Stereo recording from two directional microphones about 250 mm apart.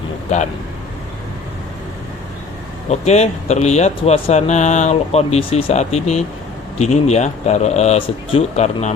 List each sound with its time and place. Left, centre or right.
2.9 s speech: left